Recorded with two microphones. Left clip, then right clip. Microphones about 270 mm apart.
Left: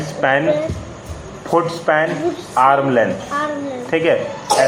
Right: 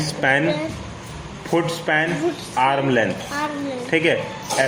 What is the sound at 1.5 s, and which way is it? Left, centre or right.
A man's voice, right.